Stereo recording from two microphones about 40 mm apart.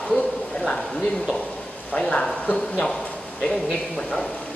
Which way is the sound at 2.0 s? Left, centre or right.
Left.